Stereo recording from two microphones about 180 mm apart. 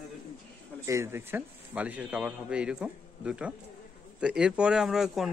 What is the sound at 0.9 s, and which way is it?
A man's voice, 15° right (ahead or behind).